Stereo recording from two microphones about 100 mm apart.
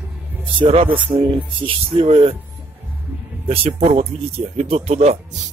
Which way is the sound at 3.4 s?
70° right (ahead or behind).